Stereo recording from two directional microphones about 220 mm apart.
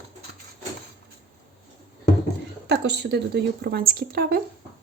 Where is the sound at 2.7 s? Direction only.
50° right (ahead or behind).